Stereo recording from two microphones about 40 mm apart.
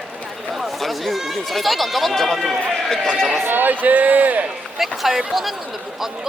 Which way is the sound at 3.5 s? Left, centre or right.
Right.